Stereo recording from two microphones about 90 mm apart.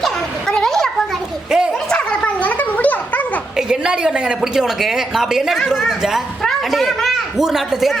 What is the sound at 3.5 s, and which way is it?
A woman's voice, 10° right (ahead or behind).